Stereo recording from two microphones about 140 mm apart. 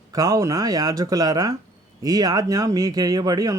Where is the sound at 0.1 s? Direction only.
25° right (ahead or behind).